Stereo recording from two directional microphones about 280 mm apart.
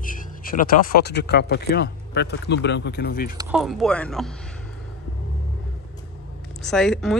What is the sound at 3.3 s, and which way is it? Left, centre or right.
Speech, centre.